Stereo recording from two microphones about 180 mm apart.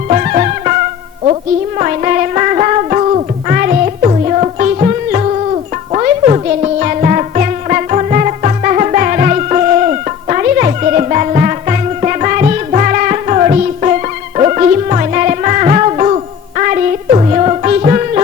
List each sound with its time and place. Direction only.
0.1 s music: 40° right (ahead or behind)
1.8 s music: 40° right (ahead or behind)
3.5 s music: 50° right (ahead or behind)
4.0 s music: 35° right (ahead or behind)